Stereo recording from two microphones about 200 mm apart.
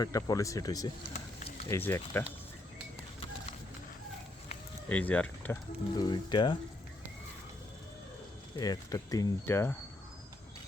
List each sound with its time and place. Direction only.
0.0 s speech: 20° left (ahead or behind)
1.1 s a sound: 30° left (ahead or behind)
1.6 s speech: 10° left (ahead or behind)
4.9 s speech: 5° left (ahead or behind)
6.0 s speech: 20° left (ahead or behind)
8.5 s speech: 20° left (ahead or behind)